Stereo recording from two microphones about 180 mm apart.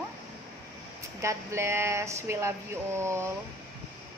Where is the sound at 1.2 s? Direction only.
15° right (ahead or behind).